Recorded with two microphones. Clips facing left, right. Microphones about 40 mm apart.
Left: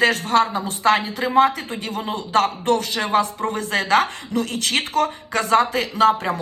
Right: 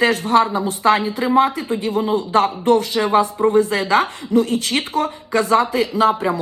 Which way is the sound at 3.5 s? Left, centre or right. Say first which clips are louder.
Right 1 dB; left.